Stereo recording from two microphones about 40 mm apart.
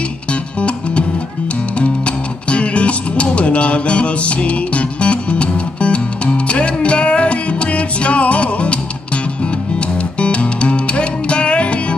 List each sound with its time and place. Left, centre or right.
0.3 s music: left
10.1 s music: left